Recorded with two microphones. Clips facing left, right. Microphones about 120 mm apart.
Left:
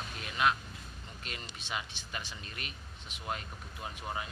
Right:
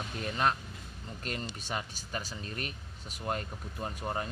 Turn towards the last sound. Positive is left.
turn(degrees=-40)  # may be behind; listen again after turning